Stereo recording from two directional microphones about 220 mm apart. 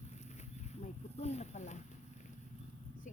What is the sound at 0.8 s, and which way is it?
Speech, 30° left (ahead or behind).